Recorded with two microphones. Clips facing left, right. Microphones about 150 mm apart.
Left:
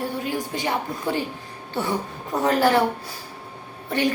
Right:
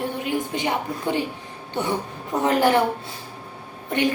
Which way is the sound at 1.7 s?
20° right (ahead or behind).